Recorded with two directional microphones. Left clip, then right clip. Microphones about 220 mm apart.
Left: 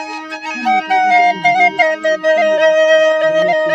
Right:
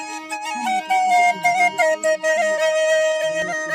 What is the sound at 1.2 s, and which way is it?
Flute, 50° right (ahead or behind).